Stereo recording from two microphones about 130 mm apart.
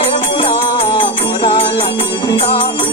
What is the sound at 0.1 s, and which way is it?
Music, 40° left (ahead or behind).